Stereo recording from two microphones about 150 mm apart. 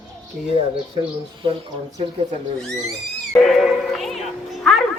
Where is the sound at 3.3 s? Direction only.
Centre (ahead or behind).